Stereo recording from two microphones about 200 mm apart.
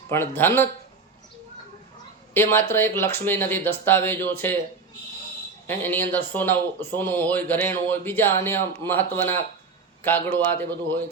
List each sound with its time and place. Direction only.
0.1 s speech: 10° left (ahead or behind)
2.3 s speech: 10° left (ahead or behind)
5.6 s speech: 10° left (ahead or behind)